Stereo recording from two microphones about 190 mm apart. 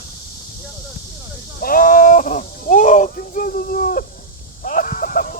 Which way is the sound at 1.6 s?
45° left (ahead or behind).